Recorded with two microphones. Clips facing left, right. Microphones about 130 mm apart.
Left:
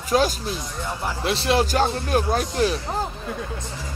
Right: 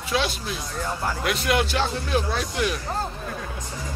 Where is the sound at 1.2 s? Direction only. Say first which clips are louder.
Left 4 dB; 30° left (ahead or behind); by 2.7 s 45° left (ahead or behind).